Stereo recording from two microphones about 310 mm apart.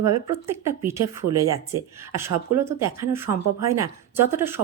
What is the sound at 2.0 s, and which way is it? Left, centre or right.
Speech, centre.